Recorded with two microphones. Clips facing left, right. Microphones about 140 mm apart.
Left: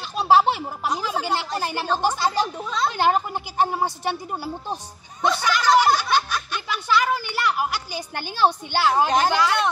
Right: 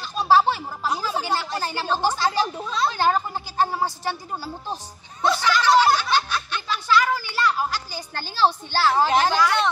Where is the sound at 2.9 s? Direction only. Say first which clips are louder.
Left 3 dB; 15° left (ahead or behind).